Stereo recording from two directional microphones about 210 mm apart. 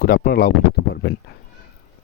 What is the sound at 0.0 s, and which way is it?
Speech, 45° left (ahead or behind).